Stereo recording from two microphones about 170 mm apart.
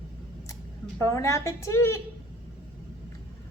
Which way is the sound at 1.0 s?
15° left (ahead or behind).